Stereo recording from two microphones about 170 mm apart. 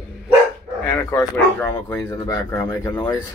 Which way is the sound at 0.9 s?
10° left (ahead or behind).